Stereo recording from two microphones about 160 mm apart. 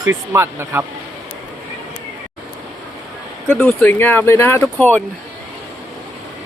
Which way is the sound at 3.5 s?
5° left (ahead or behind).